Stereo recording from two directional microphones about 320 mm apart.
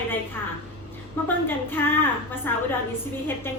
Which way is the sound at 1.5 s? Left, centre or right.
Centre.